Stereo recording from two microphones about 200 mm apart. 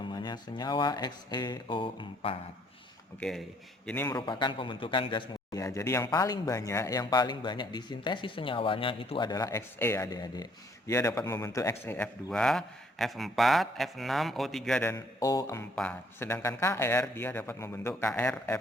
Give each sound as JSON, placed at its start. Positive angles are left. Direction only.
{"t": 0.1, "sound": "speech", "side_deg": 20}
{"t": 3.2, "sound": "a man's voice", "side_deg": 0}
{"t": 4.3, "sound": "a man's voice", "side_deg": 25}
{"t": 14.9, "sound": "a man's voice", "side_deg": 20}
{"t": 15.7, "sound": "a man's voice", "side_deg": 5}